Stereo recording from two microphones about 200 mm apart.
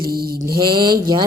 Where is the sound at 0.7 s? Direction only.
20° right (ahead or behind).